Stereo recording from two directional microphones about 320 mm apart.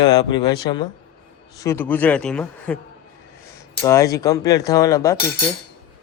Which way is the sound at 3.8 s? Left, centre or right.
Centre.